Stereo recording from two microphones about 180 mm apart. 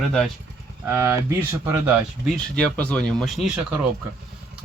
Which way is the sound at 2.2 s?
Centre (ahead or behind).